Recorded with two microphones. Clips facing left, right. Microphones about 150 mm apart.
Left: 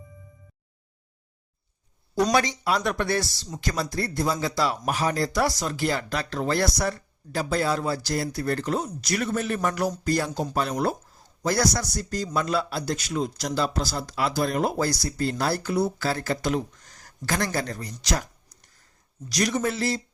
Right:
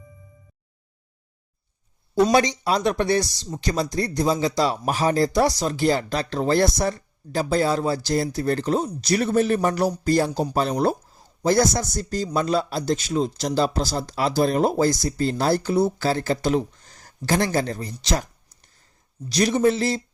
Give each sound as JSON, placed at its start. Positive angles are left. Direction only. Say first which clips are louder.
{"t": 2.3, "sound": "speech", "louder": "right 4 dB", "side_deg": -20}
{"t": 19.3, "sound": "speech", "louder": "right 6 dB", "side_deg": -30}